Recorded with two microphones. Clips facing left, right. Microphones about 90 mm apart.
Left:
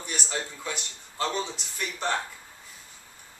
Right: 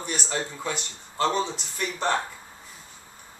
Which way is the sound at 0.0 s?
35° right (ahead or behind).